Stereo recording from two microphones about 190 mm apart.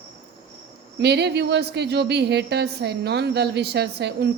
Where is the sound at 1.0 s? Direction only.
60° right (ahead or behind).